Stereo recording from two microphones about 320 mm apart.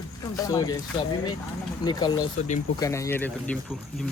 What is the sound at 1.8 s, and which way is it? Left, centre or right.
Speech, centre.